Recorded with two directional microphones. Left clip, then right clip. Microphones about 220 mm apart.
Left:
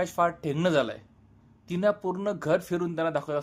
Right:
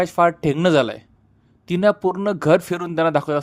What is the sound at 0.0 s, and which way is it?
Speech, 30° right (ahead or behind).